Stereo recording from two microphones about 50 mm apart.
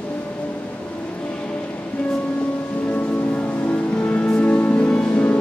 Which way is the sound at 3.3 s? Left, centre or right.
Left.